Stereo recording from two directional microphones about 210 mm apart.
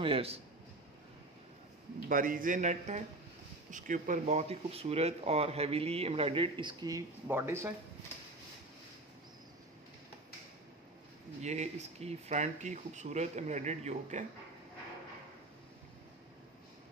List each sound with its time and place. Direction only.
0.0 s speech: 25° right (ahead or behind)
2.0 s speech: 40° right (ahead or behind); by 7.7 s 10° right (ahead or behind)
11.4 s speech: 30° right (ahead or behind)